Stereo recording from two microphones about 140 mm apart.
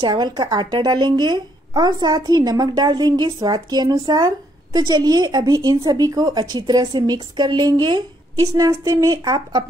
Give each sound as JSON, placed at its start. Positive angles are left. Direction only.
{"t": 0.0, "sound": "a woman's voice", "side_deg": -30}